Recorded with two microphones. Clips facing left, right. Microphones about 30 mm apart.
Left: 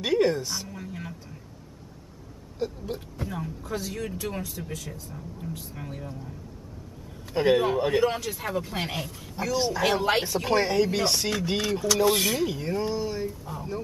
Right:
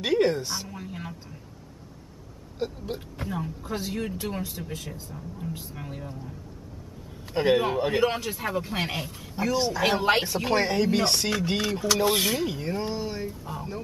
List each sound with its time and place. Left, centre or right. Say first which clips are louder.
0.0 s a sound: even; centre
3.3 s speech: right 3 dB; centre
3.6 s speech: even; right
5.8 s speech: even; centre
7.3 s speech: left 1 dB; centre
9.6 s speech: left 1 dB; centre
9.8 s speech: right 2 dB; centre